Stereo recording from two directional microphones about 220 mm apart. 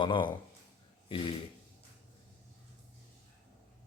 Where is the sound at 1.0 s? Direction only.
20° left (ahead or behind).